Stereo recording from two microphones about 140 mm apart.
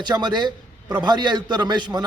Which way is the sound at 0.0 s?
30° right (ahead or behind).